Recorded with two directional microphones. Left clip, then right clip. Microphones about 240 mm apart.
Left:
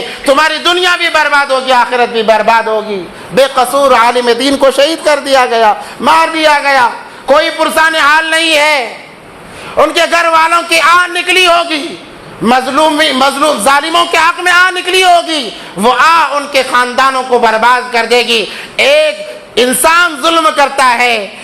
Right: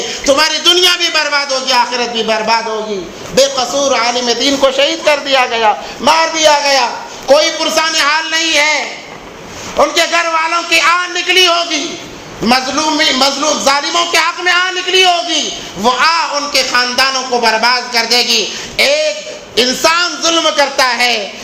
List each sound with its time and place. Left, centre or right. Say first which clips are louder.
0.3 s a man's voice: left 2 dB; left